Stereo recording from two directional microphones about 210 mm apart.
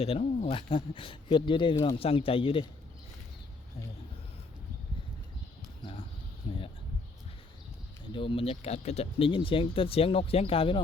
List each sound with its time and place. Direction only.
0.0 s speech: 30° left (ahead or behind)
5.8 s a sound: 25° left (ahead or behind)
8.1 s speech: 25° left (ahead or behind)